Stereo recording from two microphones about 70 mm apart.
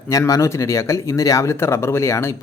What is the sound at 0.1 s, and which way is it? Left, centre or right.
Speech, left.